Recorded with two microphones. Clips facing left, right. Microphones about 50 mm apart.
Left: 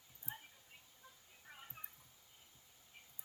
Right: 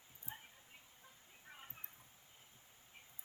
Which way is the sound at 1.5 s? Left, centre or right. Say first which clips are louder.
Even; centre.